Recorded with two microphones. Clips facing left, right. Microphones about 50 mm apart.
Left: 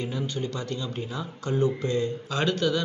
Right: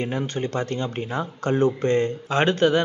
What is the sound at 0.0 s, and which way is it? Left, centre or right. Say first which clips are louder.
Speech: right 4 dB; right.